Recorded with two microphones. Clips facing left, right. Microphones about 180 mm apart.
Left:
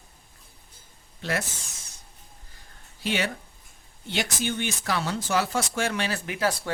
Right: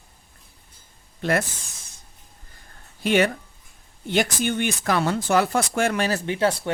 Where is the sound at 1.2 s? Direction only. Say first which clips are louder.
Right 7 dB; 55° right (ahead or behind).